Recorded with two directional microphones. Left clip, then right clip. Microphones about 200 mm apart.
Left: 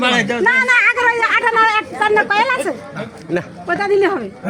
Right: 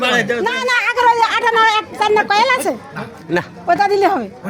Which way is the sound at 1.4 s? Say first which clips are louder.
Right 1 dB; 40° right (ahead or behind).